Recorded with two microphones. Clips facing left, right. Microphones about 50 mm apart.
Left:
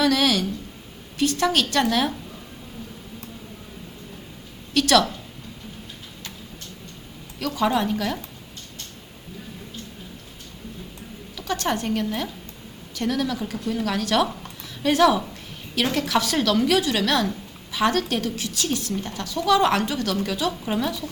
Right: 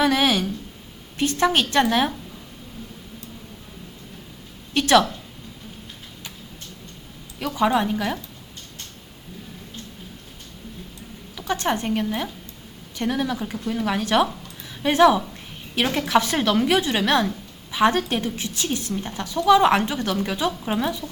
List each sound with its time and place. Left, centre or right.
0.0 s a sound: right
1.1 s a woman's voice: right
4.7 s a woman's voice: right
7.3 s speech: centre
11.3 s a woman's voice: right